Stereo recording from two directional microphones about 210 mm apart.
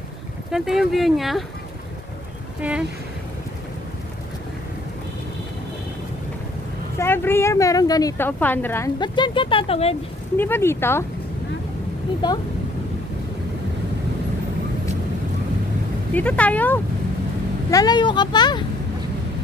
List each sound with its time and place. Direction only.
0.5 s speech: centre (ahead or behind)
2.6 s speech: 5° right (ahead or behind)
7.0 s speech: 10° left (ahead or behind); by 9.9 s 30° left (ahead or behind)
10.3 s speech: 10° left (ahead or behind)
16.2 s speech: 5° left (ahead or behind)